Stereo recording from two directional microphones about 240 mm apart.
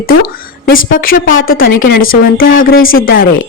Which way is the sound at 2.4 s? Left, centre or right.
Left.